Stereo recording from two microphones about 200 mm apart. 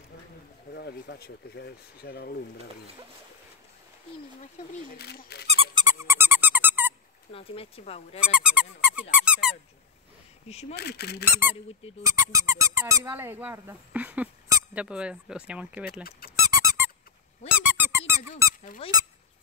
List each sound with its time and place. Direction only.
0.7 s speech: 55° left (ahead or behind)
4.9 s speech: 55° left (ahead or behind)
5.5 s squeak: 25° right (ahead or behind); by 6.9 s 10° right (ahead or behind)
7.3 s speech: 30° left (ahead or behind)
8.2 s squeak: 5° right (ahead or behind)
10.5 s speech: 30° left (ahead or behind)
10.8 s speech: 55° left (ahead or behind)
12.0 s speech: 15° right (ahead or behind)
16.3 s squeak: 15° right (ahead or behind)
18.8 s speech: 30° left (ahead or behind)